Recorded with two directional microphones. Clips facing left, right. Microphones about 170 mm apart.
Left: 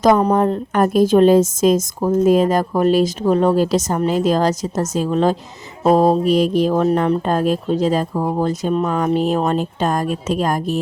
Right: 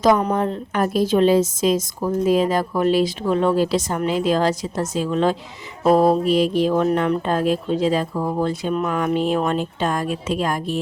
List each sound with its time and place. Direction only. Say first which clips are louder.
0.0 s a woman's voice: left 4 dB; 45° left (ahead or behind)